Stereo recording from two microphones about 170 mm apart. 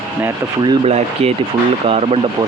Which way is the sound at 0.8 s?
35° right (ahead or behind).